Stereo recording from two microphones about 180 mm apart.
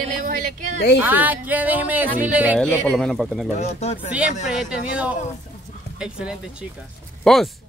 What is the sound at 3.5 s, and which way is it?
Speech, 40° left (ahead or behind).